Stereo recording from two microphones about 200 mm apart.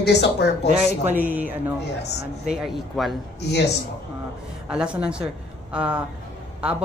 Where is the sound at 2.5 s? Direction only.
Centre (ahead or behind).